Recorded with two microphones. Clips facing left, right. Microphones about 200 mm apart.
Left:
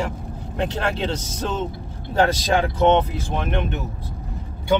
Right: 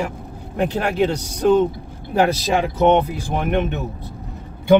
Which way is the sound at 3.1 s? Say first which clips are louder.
Right 4 dB; 15° right (ahead or behind).